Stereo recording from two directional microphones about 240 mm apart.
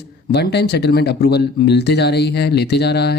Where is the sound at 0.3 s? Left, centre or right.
Left.